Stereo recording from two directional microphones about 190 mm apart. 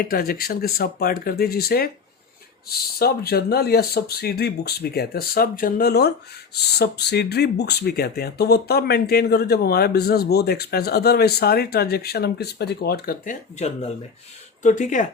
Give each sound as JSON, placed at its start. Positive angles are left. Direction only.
{"t": 0.0, "sound": "speech", "side_deg": 50}
{"t": 14.6, "sound": "speech", "side_deg": 40}